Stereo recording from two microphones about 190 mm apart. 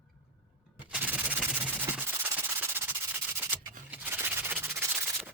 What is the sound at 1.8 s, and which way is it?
Sanding, 10° right (ahead or behind).